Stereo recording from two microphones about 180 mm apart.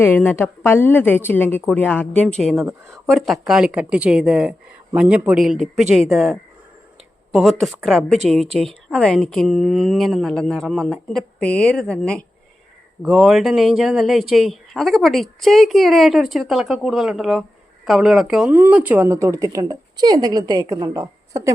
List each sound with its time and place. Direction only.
0.0 s a woman's voice: 10° left (ahead or behind)
2.6 s speech: 10° right (ahead or behind)
3.1 s speech: centre (ahead or behind); by 21.5 s 15° right (ahead or behind)